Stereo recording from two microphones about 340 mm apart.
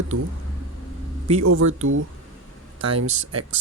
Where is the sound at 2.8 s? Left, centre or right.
Right.